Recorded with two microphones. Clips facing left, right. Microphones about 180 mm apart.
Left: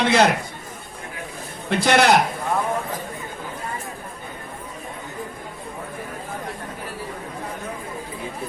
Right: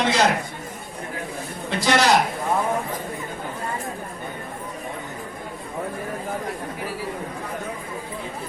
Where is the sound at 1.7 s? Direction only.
60° left (ahead or behind).